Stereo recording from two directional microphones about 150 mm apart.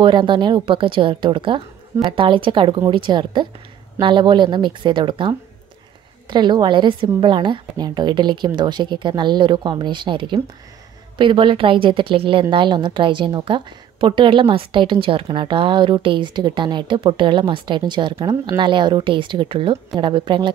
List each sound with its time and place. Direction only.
0.0 s a woman's voice: 30° right (ahead or behind)